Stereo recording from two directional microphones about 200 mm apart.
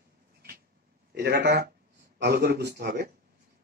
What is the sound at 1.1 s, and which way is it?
A man's voice, 55° right (ahead or behind).